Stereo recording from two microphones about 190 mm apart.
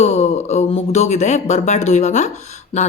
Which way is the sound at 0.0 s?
35° left (ahead or behind).